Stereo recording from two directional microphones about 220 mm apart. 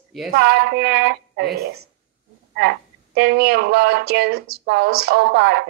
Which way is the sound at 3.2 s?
45° right (ahead or behind).